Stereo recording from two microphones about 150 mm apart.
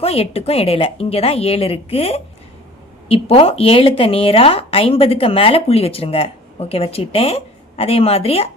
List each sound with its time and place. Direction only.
0.0 s speech: 40° left (ahead or behind)